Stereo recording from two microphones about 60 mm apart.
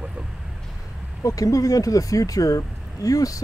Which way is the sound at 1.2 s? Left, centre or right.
Left.